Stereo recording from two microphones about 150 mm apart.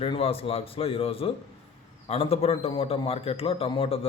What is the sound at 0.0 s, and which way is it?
A man's voice, 40° left (ahead or behind).